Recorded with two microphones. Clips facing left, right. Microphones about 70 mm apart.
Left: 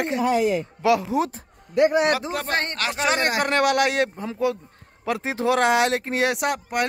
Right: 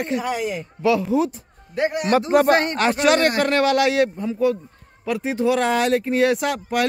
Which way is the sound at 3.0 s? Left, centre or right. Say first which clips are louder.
Right 3 dB; left.